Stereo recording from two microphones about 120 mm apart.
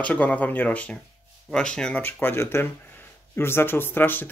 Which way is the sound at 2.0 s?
15° left (ahead or behind).